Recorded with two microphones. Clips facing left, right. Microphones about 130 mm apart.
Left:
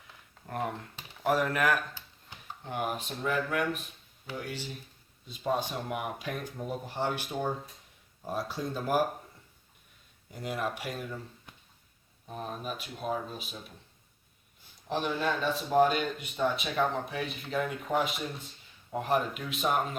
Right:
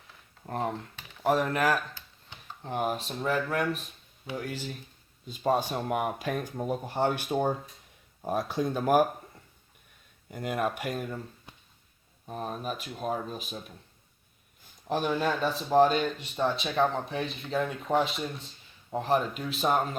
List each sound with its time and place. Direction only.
0.4 s speech: 30° right (ahead or behind); by 9.0 s 55° right (ahead or behind)
10.3 s speech: 55° right (ahead or behind)
12.3 s speech: 40° right (ahead or behind)
14.8 s speech: 40° right (ahead or behind)